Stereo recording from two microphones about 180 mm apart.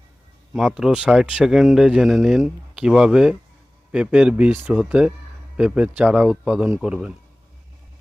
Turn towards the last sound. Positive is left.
turn(degrees=-5)  # may be behind; listen again after turning